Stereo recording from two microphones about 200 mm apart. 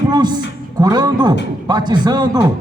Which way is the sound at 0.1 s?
20° right (ahead or behind).